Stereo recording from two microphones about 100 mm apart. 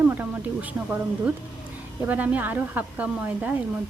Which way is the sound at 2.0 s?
15° right (ahead or behind).